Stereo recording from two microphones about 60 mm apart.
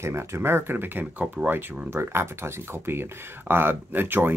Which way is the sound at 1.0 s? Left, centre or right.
Right.